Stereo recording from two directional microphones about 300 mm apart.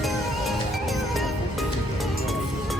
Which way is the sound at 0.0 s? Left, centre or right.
Centre.